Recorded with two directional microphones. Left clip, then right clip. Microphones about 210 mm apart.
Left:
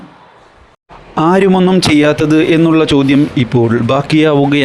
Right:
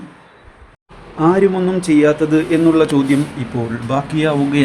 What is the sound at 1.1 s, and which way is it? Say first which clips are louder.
A man's voice: left 4 dB; 45° left (ahead or behind).